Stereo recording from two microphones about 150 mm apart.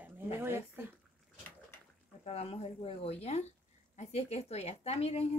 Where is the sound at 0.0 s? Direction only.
15° right (ahead or behind).